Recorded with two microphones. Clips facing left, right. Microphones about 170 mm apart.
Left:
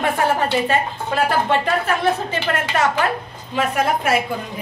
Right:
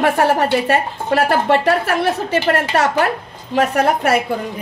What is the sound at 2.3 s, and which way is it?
Speech, 40° right (ahead or behind).